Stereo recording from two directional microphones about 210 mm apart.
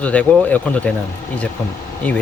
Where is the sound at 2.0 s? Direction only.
5° left (ahead or behind).